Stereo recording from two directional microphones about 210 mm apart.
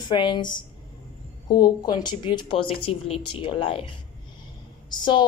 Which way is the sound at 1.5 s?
20° left (ahead or behind).